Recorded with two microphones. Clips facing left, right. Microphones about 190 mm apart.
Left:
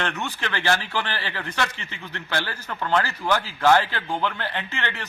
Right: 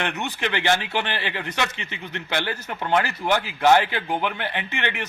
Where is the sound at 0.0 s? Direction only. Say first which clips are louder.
Right 2 dB; 20° right (ahead or behind).